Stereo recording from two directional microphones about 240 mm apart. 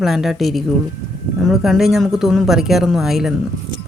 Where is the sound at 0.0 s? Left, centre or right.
Centre.